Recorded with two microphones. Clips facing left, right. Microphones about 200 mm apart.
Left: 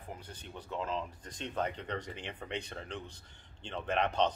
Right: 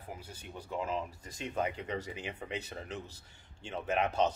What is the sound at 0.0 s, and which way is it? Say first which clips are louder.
Speech: even; 10° right (ahead or behind).